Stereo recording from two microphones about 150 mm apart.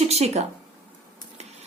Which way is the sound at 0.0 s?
45° right (ahead or behind).